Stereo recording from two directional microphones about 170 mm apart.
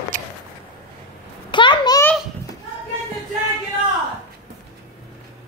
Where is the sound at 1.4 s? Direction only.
25° left (ahead or behind).